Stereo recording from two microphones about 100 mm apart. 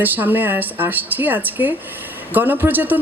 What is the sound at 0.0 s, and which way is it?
A woman's voice, 20° right (ahead or behind).